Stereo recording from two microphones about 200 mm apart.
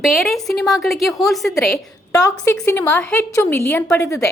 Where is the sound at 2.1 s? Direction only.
15° left (ahead or behind).